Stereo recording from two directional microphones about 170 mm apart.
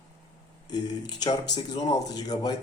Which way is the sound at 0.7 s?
25° left (ahead or behind).